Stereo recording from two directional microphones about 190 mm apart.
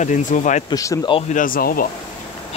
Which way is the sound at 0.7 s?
20° left (ahead or behind).